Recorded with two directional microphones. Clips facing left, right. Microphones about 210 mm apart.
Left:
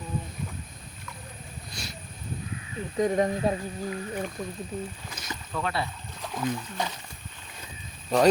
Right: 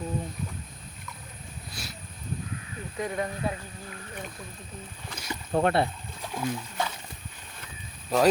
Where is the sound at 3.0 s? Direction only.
35° left (ahead or behind).